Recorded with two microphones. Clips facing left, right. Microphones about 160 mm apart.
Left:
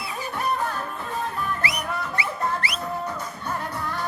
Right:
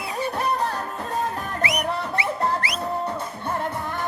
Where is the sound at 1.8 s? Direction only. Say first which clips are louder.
Right 3 dB; 30° right (ahead or behind).